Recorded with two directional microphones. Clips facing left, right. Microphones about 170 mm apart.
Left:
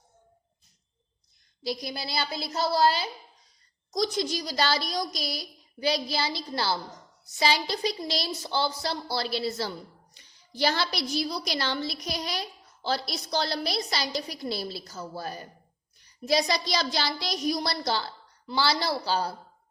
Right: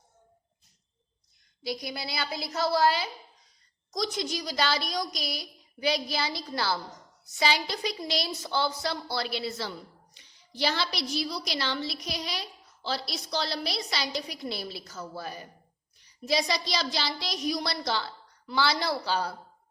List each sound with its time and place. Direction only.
1.6 s a woman's voice: 35° left (ahead or behind)